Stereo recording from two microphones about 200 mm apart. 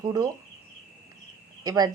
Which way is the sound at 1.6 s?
20° right (ahead or behind).